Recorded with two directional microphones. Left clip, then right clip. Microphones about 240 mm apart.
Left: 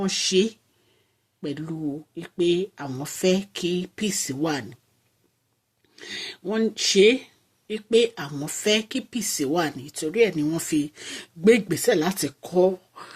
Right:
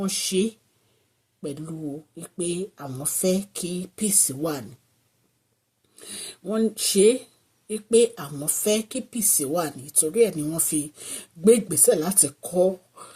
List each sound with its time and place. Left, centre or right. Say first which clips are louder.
0.0 s speech: left 3 dB; centre
6.1 s speech: even; centre